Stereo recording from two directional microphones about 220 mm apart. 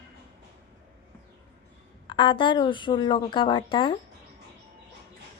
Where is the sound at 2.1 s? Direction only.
20° left (ahead or behind).